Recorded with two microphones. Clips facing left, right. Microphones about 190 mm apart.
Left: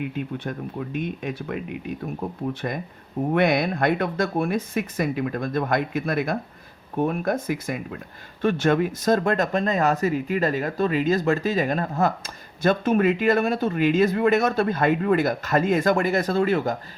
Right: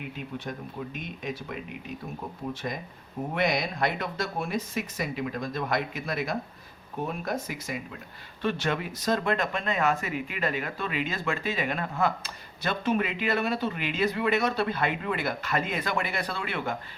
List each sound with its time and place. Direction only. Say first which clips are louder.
0.4 s speech: left 6 dB; 60° left (ahead or behind); by 16.7 s 40° left (ahead or behind)